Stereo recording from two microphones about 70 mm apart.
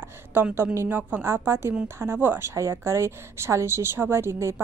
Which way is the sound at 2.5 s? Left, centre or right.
Right.